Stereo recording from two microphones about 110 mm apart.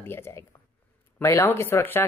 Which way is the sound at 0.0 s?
20° left (ahead or behind).